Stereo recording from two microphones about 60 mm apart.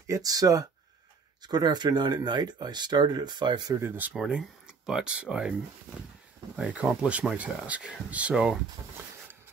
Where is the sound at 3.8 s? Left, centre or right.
Right.